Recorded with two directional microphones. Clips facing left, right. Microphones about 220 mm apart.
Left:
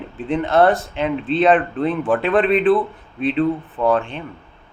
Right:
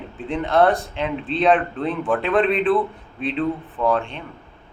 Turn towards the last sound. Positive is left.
turn(degrees=5)  # may be behind; listen again after turning